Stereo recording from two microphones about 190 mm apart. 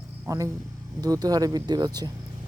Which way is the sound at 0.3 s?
15° right (ahead or behind).